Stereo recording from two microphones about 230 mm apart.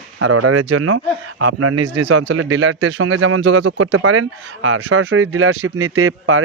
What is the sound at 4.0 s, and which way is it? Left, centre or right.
Speech, right.